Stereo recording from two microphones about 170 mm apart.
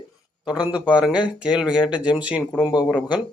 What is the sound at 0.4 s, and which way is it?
Speech, 5° right (ahead or behind).